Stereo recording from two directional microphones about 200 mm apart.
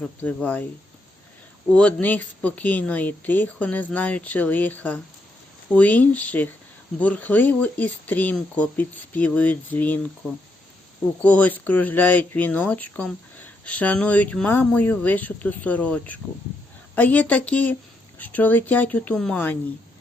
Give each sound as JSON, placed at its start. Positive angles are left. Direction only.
{"t": 0.0, "sound": "speech", "side_deg": 5}
{"t": 1.7, "sound": "speech", "side_deg": 5}
{"t": 11.2, "sound": "speech", "side_deg": 5}